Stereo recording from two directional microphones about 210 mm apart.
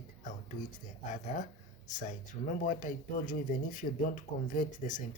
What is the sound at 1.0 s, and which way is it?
Speech, 35° left (ahead or behind).